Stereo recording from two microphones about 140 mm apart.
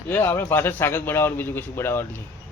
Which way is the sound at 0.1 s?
20° left (ahead or behind).